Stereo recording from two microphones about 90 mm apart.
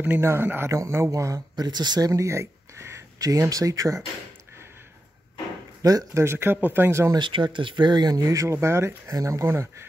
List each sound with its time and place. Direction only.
0.0 s speech: 25° right (ahead or behind)
5.8 s speech: 45° right (ahead or behind)
6.2 s speech: 25° right (ahead or behind)
7.2 s speech: 65° right (ahead or behind); by 9.8 s 30° right (ahead or behind)